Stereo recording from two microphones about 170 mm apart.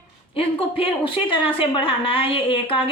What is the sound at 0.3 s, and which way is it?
A woman's voice, 30° left (ahead or behind).